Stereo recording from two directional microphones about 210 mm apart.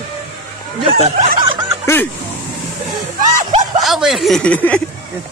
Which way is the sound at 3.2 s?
35° right (ahead or behind).